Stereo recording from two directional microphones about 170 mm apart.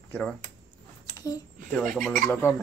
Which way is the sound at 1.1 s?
20° left (ahead or behind).